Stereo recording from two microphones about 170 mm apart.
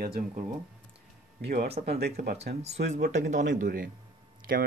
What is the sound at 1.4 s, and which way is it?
Speech, 65° right (ahead or behind).